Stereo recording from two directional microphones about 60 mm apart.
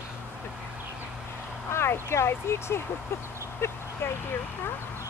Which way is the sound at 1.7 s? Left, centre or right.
Left.